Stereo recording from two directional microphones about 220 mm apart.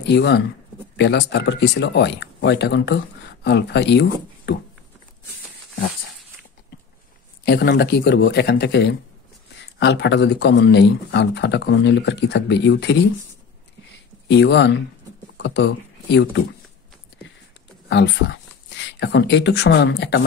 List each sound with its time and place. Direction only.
0.0 s speech: 50° left (ahead or behind)
7.4 s speech: 50° left (ahead or behind)
14.3 s speech: 50° left (ahead or behind)
17.8 s speech: 55° left (ahead or behind)